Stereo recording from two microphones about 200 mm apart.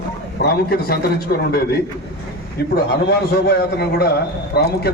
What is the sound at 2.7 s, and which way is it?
A man's voice, 55° left (ahead or behind).